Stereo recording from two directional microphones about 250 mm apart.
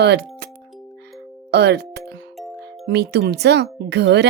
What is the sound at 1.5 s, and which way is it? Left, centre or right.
Music, right.